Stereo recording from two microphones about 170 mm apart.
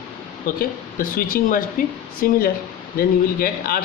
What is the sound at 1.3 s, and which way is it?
Speech, 55° left (ahead or behind).